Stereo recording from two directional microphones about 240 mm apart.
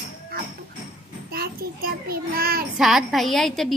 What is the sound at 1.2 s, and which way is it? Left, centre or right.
A child's voice, right.